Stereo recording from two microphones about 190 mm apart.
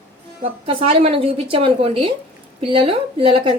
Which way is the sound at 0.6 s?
30° right (ahead or behind).